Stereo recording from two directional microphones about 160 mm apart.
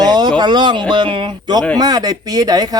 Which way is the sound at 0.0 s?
25° right (ahead or behind).